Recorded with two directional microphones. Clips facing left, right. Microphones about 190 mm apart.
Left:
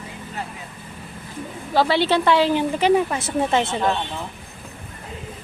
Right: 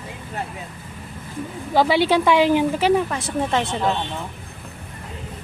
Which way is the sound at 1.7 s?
15° right (ahead or behind).